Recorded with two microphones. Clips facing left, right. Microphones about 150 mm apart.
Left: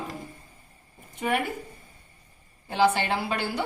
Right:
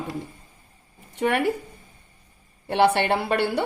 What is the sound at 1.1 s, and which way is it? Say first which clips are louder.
Speech: right 4 dB; 70° right (ahead or behind).